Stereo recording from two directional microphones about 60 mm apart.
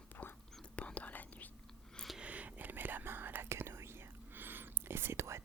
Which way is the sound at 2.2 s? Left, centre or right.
Right.